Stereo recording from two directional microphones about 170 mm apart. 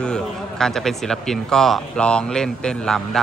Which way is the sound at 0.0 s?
5° left (ahead or behind).